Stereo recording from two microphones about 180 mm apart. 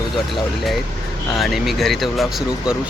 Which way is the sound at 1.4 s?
Centre (ahead or behind).